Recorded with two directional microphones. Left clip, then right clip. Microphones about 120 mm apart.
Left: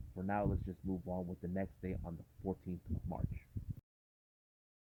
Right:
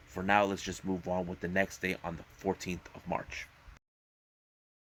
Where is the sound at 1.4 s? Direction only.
5° right (ahead or behind).